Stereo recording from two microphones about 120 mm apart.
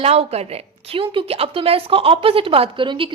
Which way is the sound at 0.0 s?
60° right (ahead or behind).